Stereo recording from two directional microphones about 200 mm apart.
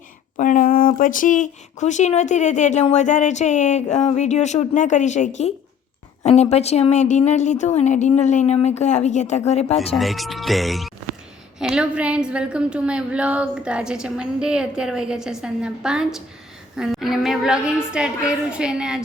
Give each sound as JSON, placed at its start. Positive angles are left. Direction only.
{"t": 0.3, "sound": "speech", "side_deg": 40}
{"t": 9.7, "sound": "a woman's voice", "side_deg": 0}